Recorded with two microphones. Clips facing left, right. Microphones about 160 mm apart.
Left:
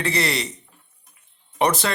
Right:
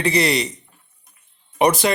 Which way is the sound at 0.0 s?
15° right (ahead or behind).